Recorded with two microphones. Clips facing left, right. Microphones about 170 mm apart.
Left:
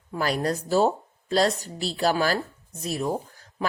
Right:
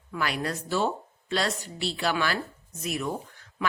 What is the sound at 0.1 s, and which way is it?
Speech, 35° left (ahead or behind).